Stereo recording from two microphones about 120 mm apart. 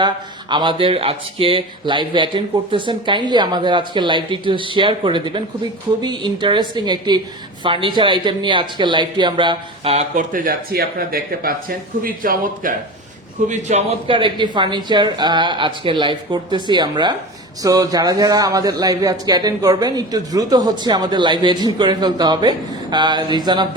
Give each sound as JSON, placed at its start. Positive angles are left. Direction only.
{"t": 0.5, "sound": "a man's voice", "side_deg": -40}
{"t": 9.9, "sound": "speech", "side_deg": -75}
{"t": 13.5, "sound": "a man's voice", "side_deg": -80}
{"t": 14.1, "sound": "a man's voice", "side_deg": -40}